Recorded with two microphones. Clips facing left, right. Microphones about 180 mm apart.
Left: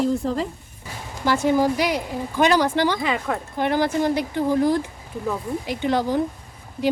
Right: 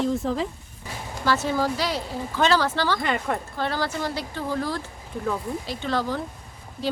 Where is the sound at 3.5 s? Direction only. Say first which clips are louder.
Left 6 dB; 20° left (ahead or behind).